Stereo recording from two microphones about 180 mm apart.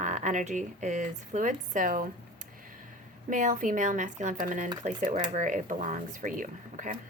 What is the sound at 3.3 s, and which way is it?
A woman's voice, 45° right (ahead or behind).